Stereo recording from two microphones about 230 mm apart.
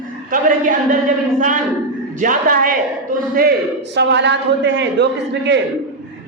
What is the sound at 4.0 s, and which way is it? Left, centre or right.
A man's voice, right.